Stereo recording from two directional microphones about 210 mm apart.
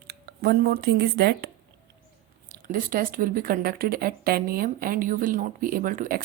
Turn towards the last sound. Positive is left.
turn(degrees=-40)  # may be behind; listen again after turning